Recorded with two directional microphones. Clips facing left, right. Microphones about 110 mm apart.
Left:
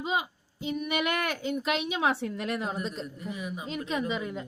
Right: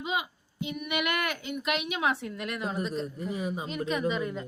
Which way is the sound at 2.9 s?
35° right (ahead or behind).